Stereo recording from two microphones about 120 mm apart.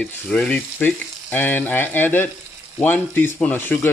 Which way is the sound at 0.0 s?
10° left (ahead or behind).